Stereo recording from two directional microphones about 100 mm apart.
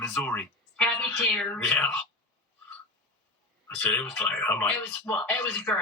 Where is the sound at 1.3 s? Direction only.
10° left (ahead or behind).